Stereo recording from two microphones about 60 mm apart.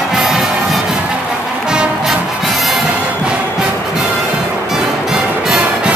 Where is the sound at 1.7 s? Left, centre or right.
Centre.